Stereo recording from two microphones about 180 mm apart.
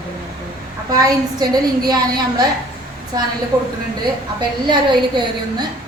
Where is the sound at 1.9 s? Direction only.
20° right (ahead or behind).